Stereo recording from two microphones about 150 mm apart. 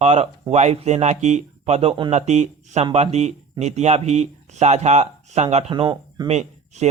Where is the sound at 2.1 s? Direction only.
50° right (ahead or behind).